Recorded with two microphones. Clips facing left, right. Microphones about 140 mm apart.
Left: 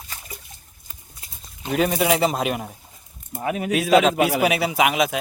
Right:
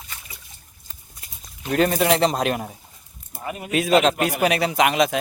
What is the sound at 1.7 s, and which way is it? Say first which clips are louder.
Speech: right 1 dB; 5° left (ahead or behind).